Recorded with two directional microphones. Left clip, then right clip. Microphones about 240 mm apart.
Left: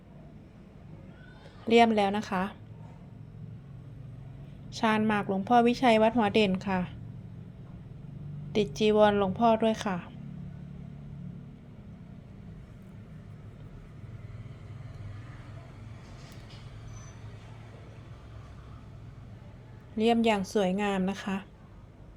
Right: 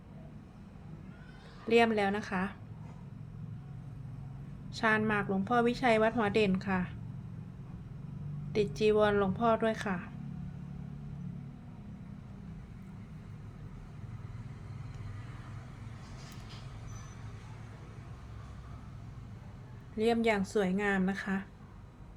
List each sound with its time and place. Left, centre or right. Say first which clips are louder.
1.6 s a woman's voice: left 4 dB; centre
4.7 s a woman's voice: left 2 dB; left
8.5 s a woman's voice: left 3 dB; centre
20.0 s a woman's voice: left 4 dB; centre